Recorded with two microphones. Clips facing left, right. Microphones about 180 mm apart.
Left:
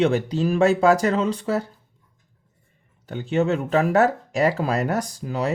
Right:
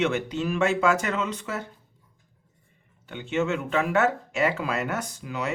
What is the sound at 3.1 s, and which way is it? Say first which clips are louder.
Speech: left 5 dB; 35° left (ahead or behind).